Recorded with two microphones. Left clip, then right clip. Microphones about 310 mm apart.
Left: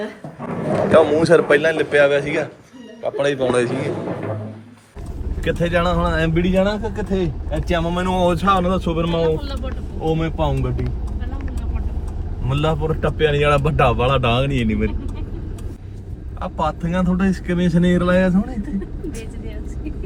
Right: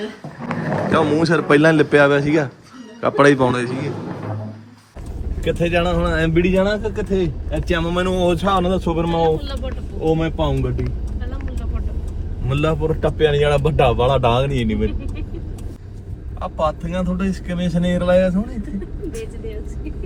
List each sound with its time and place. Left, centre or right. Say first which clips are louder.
0.9 s a man's voice: left 4 dB; centre
5.4 s speech: even; centre
12.5 s speech: right 1 dB; centre
16.4 s speech: right 1 dB; centre